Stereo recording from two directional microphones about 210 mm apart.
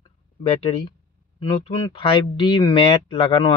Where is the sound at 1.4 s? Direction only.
25° left (ahead or behind).